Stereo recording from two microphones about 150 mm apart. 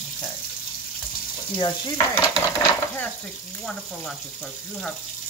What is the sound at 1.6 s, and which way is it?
Sizzle, 30° left (ahead or behind).